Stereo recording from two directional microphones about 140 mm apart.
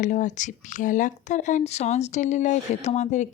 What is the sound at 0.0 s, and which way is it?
A woman's voice, 65° left (ahead or behind).